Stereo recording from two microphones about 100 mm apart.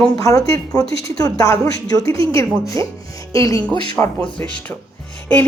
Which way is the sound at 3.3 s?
35° left (ahead or behind).